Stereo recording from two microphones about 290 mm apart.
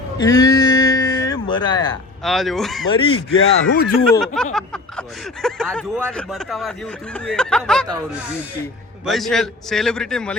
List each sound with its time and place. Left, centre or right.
0.2 s a sound: centre
2.2 s speech: centre
2.9 s speech: centre
3.2 s speech: left
4.0 s speech: centre
9.0 s speech: centre